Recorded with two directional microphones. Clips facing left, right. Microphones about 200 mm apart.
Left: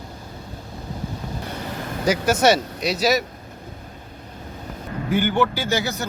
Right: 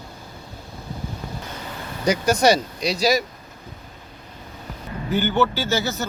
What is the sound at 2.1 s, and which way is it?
Speech, 5° left (ahead or behind).